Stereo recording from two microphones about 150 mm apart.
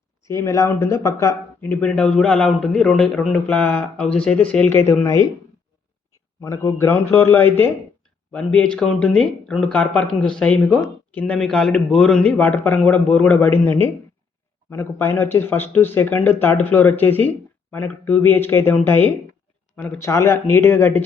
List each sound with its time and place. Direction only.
0.3 s speech: 20° left (ahead or behind)
6.4 s speech: 20° left (ahead or behind)
20.0 s speech: 20° left (ahead or behind)